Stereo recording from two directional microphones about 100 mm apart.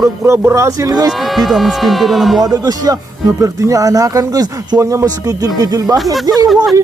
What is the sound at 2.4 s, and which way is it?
Speech, 40° right (ahead or behind).